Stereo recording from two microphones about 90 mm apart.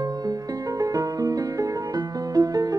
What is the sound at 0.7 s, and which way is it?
Music, 40° right (ahead or behind).